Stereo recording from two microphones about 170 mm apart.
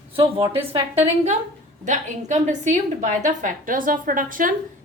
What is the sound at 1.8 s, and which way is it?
A woman's voice, 45° right (ahead or behind).